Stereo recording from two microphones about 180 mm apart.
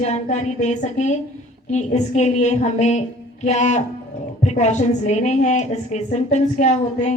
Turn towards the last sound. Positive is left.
turn(degrees=40)  # may be behind; listen again after turning